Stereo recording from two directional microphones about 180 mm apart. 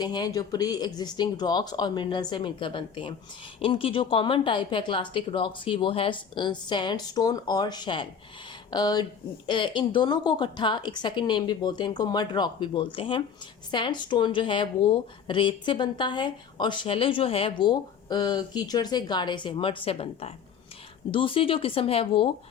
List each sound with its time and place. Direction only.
0.0 s speech: 25° left (ahead or behind)